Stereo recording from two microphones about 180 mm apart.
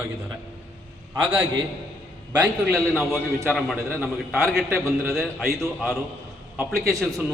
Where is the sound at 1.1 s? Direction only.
10° right (ahead or behind).